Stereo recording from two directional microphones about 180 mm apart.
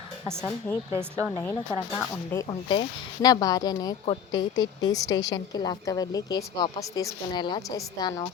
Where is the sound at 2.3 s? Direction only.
20° left (ahead or behind).